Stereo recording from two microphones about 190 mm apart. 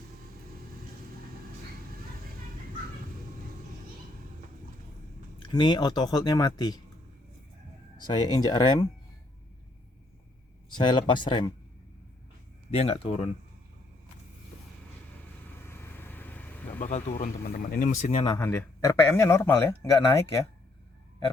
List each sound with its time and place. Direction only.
5.4 s speech: 25° left (ahead or behind)
8.0 s speech: 20° left (ahead or behind)
10.8 s speech: 25° left (ahead or behind)
12.7 s speech: 30° left (ahead or behind)
15.6 s vehicle: 15° left (ahead or behind)
16.8 s speech: 35° left (ahead or behind)
18.3 s speech: 15° left (ahead or behind)